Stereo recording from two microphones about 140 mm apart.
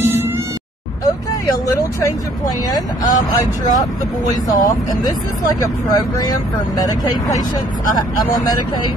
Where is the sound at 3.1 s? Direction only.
30° left (ahead or behind).